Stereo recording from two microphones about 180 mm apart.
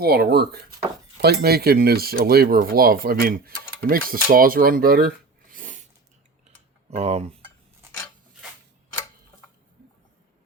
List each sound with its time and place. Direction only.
0.0 s speech: 60° right (ahead or behind)
6.9 s dishes: 35° right (ahead or behind)